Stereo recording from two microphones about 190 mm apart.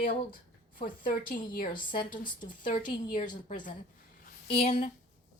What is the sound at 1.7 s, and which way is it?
Speech, 25° left (ahead or behind).